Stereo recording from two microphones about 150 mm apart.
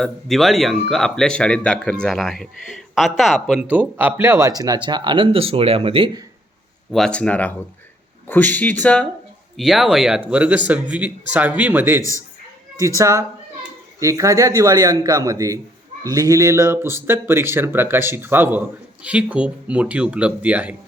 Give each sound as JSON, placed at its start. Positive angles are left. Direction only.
{"t": 0.0, "sound": "speech", "side_deg": 0}
{"t": 6.9, "sound": "speech", "side_deg": 5}
{"t": 9.6, "sound": "speech", "side_deg": 0}